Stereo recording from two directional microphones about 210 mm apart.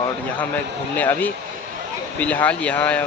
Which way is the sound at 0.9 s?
10° left (ahead or behind).